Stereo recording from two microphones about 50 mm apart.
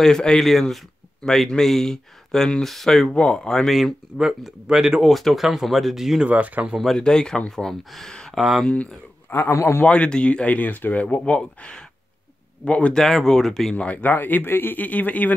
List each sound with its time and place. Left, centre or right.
0.0 s speech: centre
4.2 s speech: centre
5.0 s speech: centre
6.2 s speech: right
7.0 s speech: centre
8.1 s a sound: centre
9.3 s speech: left
9.8 s speech: left
12.9 s speech: centre
13.7 s speech: left